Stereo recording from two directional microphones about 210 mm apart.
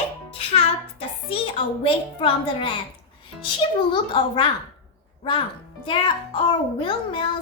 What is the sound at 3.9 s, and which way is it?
Speech, 25° left (ahead or behind).